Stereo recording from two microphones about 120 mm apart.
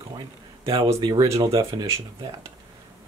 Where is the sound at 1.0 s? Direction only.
40° right (ahead or behind).